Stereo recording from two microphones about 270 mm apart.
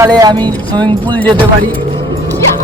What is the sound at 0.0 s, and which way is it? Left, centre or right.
Speech, centre.